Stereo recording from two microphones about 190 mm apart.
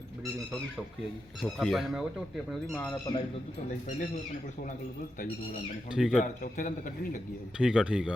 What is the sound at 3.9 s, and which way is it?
Speech, 40° left (ahead or behind).